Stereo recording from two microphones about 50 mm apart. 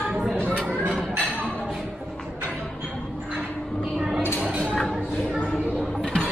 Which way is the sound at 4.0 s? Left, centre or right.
Centre.